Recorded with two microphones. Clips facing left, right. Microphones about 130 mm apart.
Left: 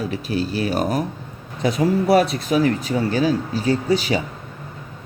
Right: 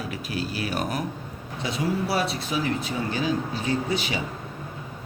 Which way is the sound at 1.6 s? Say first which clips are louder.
Left 8 dB; 45° left (ahead or behind).